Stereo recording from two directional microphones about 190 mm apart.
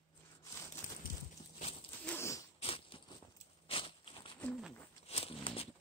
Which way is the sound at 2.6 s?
30° left (ahead or behind).